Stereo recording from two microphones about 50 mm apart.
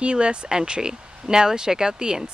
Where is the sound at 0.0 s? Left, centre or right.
Right.